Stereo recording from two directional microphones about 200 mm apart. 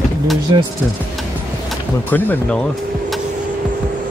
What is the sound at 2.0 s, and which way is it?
Speech, 10° left (ahead or behind).